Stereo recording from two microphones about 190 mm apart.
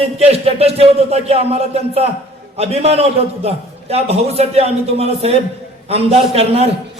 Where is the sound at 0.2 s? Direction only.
30° right (ahead or behind).